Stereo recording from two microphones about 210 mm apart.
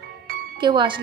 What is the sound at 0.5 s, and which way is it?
Speech, 20° right (ahead or behind).